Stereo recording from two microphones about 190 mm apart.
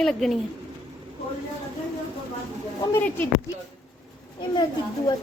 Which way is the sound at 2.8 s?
10° left (ahead or behind).